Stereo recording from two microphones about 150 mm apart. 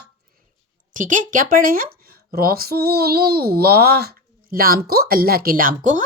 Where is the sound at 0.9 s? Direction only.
60° right (ahead or behind).